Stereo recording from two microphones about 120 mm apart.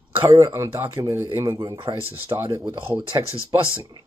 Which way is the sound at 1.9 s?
40° right (ahead or behind).